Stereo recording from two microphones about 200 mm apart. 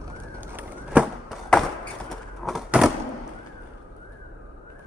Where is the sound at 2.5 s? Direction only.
5° right (ahead or behind).